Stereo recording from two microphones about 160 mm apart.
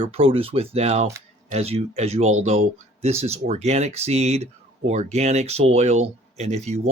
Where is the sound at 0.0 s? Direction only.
35° right (ahead or behind).